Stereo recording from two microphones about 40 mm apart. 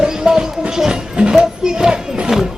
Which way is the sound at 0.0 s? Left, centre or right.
Centre.